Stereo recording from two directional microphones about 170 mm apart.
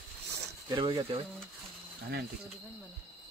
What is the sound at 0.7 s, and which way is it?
Speech, 25° right (ahead or behind).